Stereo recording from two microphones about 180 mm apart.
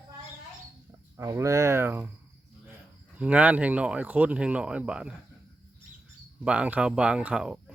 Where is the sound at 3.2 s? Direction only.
10° right (ahead or behind).